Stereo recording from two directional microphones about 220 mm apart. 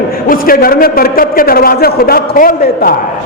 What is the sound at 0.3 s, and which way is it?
A man's voice, 40° left (ahead or behind).